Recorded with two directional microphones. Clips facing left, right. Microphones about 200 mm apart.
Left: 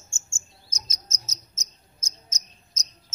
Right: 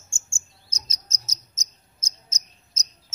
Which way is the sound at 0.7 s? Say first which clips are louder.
Left 1 dB; 35° right (ahead or behind).